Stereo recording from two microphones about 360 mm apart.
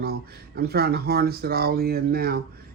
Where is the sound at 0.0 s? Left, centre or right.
Right.